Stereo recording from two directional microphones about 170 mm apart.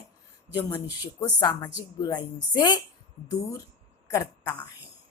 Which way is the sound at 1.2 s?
25° left (ahead or behind).